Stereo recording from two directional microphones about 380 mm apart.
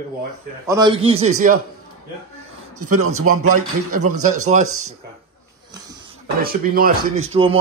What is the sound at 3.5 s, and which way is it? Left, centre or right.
Speech, right.